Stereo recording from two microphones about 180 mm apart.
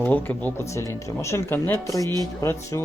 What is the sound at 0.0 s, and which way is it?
Speech, 10° left (ahead or behind).